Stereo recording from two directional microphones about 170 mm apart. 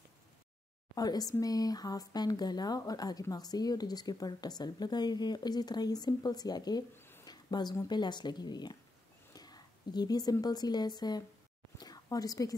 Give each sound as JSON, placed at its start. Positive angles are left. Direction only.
{"t": 0.9, "sound": "speech", "side_deg": 20}
{"t": 7.0, "sound": "a sound", "side_deg": 15}
{"t": 7.2, "sound": "a woman's voice", "side_deg": 25}